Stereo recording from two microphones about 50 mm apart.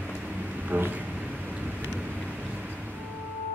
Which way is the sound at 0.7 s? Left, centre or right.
Right.